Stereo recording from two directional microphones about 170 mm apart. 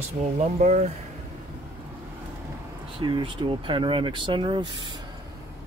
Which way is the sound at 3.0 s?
30° right (ahead or behind).